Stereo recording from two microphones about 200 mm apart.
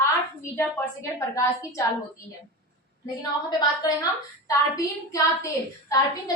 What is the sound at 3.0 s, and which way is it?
A woman's voice, 20° left (ahead or behind).